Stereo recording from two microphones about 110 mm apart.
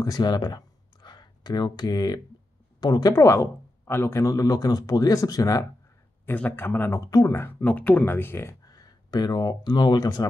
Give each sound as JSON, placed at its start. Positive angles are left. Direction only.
{"t": 0.0, "sound": "speech", "side_deg": 35}
{"t": 6.2, "sound": "speech", "side_deg": 15}
{"t": 8.6, "sound": "speech", "side_deg": 35}